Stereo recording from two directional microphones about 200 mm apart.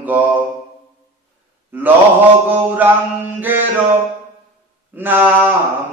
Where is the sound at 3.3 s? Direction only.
10° right (ahead or behind).